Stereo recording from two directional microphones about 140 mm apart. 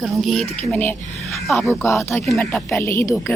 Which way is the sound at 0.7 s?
15° left (ahead or behind).